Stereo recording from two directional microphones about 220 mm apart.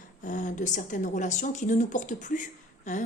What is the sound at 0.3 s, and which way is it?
A woman's voice, 35° left (ahead or behind).